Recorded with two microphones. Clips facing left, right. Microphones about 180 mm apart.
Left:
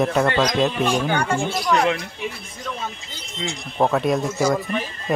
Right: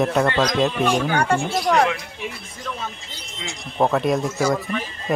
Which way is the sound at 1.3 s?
50° right (ahead or behind).